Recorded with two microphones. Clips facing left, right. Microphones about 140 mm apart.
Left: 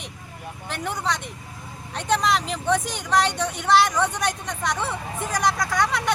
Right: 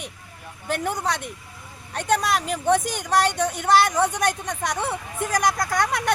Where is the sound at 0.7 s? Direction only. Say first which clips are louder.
Right 3 dB; 45° right (ahead or behind).